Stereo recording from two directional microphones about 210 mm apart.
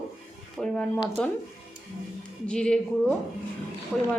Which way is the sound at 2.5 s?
5° left (ahead or behind).